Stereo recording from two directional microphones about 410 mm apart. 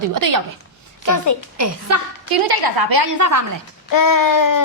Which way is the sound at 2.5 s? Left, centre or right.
Right.